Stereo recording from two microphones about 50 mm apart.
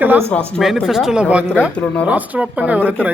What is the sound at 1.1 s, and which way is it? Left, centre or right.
Speech, right.